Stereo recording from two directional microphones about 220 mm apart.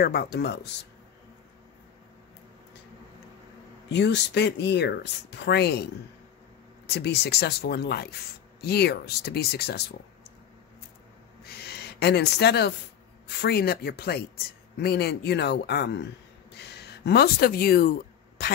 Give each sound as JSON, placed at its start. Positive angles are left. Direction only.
{"t": 0.0, "sound": "speech", "side_deg": 45}
{"t": 3.9, "sound": "speech", "side_deg": 50}
{"t": 6.9, "sound": "speech", "side_deg": 50}
{"t": 11.4, "sound": "a sound", "side_deg": 45}
{"t": 13.4, "sound": "speech", "side_deg": 45}